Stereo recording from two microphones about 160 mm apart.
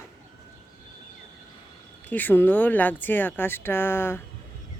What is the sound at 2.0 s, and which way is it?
Speech, 10° left (ahead or behind).